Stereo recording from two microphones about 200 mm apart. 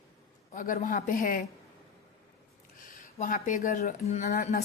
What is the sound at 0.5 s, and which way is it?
Speech, 40° left (ahead or behind).